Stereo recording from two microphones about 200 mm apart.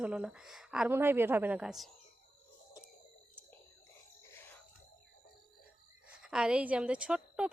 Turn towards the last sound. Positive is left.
turn(degrees=-5)  # may be behind; listen again after turning